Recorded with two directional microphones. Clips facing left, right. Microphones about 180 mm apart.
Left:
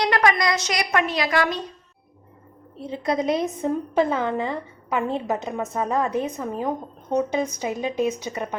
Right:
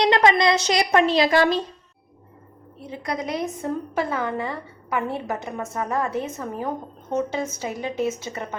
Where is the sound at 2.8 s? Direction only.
25° left (ahead or behind).